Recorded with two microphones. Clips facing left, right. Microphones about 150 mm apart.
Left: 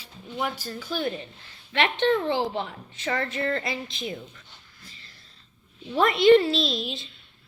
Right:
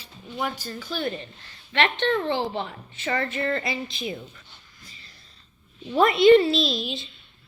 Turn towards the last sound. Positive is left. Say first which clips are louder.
# right 2 dB
turn(degrees=0)  # may be behind; listen again after turning